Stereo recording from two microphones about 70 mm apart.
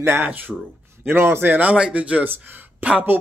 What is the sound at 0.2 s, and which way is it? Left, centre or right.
Speech, right.